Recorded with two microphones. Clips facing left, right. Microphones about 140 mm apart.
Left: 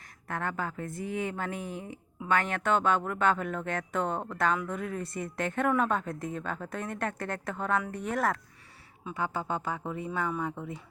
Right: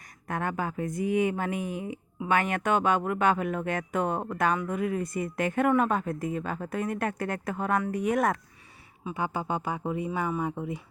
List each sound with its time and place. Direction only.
0.3 s a woman's voice: 15° right (ahead or behind)